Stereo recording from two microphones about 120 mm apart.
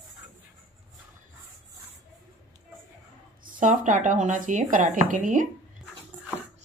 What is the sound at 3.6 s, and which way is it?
Speech, 90° right.